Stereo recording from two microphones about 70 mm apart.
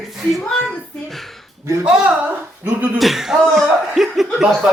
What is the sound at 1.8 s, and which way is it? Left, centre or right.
Speech, centre.